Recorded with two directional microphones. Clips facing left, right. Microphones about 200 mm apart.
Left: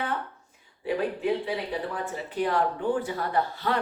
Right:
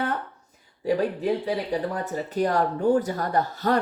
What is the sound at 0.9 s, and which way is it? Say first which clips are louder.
Speech: right 3 dB; 40° right (ahead or behind).